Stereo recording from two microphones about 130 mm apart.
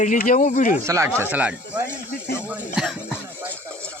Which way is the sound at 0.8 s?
25° right (ahead or behind).